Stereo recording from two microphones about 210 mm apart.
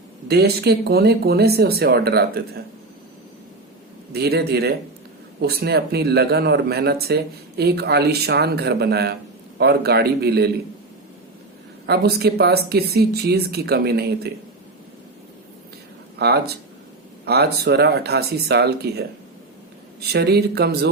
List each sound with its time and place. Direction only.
0.3 s speech: 50° right (ahead or behind)
4.1 s speech: 50° right (ahead or behind)
11.9 s speech: 50° right (ahead or behind)
16.1 s speech: 50° right (ahead or behind)
20.1 s speech: 50° right (ahead or behind)